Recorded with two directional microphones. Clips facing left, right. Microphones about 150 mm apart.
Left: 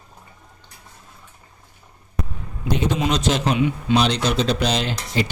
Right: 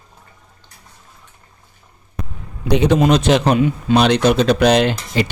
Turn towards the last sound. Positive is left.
turn(degrees=-60)  # may be behind; listen again after turning